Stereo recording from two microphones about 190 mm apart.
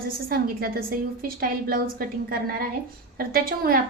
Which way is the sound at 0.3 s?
50° right (ahead or behind).